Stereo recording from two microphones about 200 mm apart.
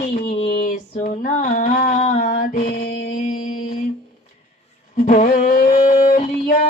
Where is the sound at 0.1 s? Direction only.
35° left (ahead or behind).